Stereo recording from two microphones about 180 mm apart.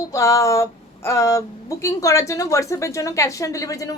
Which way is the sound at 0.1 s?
15° left (ahead or behind).